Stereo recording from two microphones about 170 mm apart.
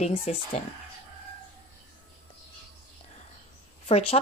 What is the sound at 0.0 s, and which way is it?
Speech, 35° left (ahead or behind).